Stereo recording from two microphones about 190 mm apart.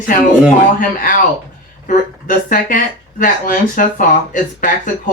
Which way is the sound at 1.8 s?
45° left (ahead or behind).